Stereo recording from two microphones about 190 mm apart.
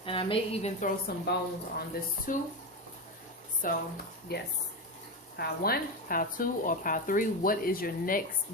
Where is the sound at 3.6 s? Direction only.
45° left (ahead or behind).